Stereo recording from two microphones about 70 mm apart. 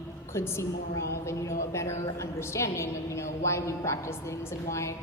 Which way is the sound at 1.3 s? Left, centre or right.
Left.